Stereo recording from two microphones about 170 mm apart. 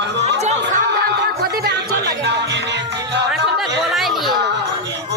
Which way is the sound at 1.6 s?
80° right.